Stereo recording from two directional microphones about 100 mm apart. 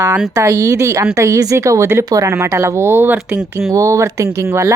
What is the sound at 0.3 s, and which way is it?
Speech, 35° right (ahead or behind).